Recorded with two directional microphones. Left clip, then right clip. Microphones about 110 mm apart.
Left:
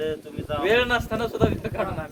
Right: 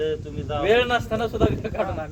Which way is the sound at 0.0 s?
35° left (ahead or behind).